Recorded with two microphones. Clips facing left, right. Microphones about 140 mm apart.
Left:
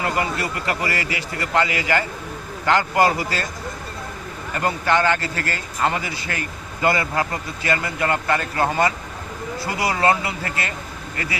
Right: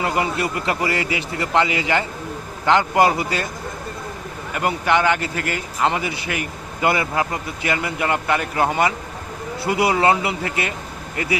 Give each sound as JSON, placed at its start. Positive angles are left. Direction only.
{"t": 0.0, "sound": "a man's voice", "side_deg": -20}
{"t": 4.5, "sound": "a man's voice", "side_deg": -15}